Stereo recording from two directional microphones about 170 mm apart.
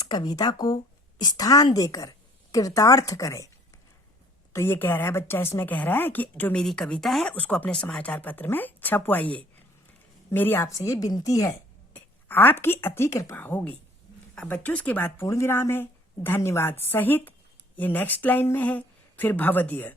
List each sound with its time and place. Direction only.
0.1 s a woman's voice: 25° left (ahead or behind)
4.5 s a woman's voice: 15° left (ahead or behind)